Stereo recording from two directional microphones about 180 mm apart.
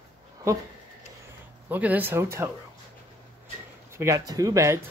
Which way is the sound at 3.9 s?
15° right (ahead or behind).